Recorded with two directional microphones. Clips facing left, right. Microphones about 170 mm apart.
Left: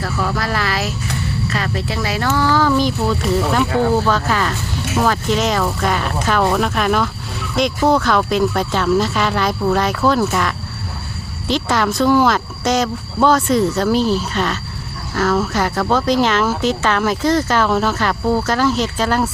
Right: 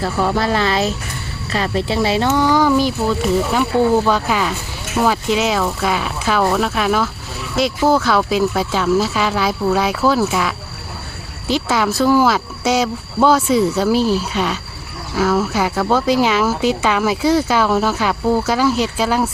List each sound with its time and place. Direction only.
0.0 s speech: 25° right (ahead or behind); by 19.3 s 10° right (ahead or behind)